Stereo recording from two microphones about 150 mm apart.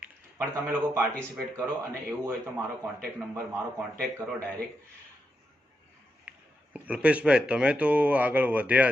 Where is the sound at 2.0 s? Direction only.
15° right (ahead or behind).